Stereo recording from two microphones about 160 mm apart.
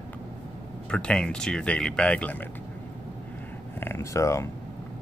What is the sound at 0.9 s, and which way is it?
Speech, 5° left (ahead or behind).